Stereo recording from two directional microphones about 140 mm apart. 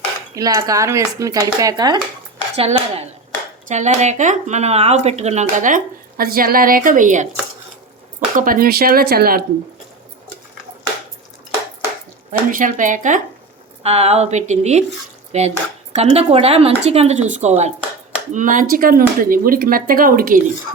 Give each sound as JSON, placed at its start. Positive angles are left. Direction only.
{"t": 0.3, "sound": "speech", "side_deg": -25}
{"t": 2.6, "sound": "speech", "side_deg": -50}
{"t": 8.4, "sound": "speech", "side_deg": -90}
{"t": 12.3, "sound": "speech", "side_deg": -70}
{"t": 13.8, "sound": "speech", "side_deg": -45}
{"t": 18.3, "sound": "speech", "side_deg": -65}